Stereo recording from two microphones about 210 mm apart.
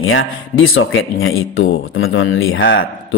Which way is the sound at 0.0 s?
70° left (ahead or behind).